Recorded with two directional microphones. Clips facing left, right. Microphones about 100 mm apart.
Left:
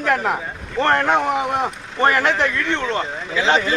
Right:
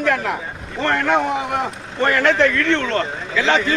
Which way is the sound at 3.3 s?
20° left (ahead or behind).